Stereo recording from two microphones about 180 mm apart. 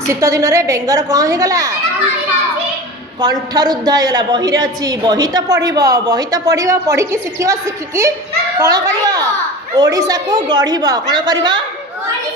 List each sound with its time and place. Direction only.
0.0 s a woman's voice: 15° right (ahead or behind)
3.2 s a woman's voice: 20° right (ahead or behind)